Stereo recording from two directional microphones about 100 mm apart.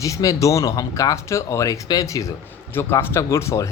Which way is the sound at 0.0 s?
35° left (ahead or behind).